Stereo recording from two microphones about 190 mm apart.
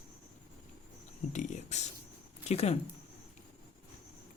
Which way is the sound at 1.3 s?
40° left (ahead or behind).